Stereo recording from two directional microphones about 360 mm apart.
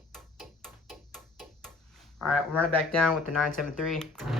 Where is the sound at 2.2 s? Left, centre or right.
Centre.